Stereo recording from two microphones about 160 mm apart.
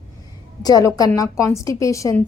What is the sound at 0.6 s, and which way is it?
A woman's voice, 20° left (ahead or behind).